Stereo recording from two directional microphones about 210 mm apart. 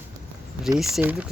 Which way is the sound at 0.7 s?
5° right (ahead or behind).